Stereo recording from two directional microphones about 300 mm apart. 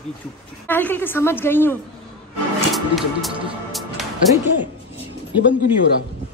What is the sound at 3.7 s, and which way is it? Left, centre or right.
Music, centre.